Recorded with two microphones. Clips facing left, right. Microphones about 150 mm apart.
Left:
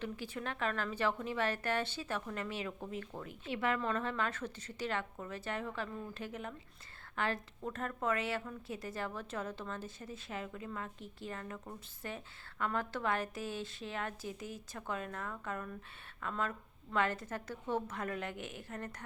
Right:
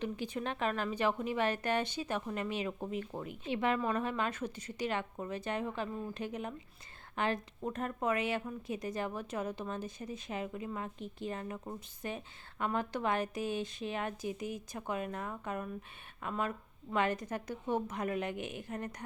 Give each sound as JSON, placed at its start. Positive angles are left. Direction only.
{"t": 0.0, "sound": "a woman's voice", "side_deg": -20}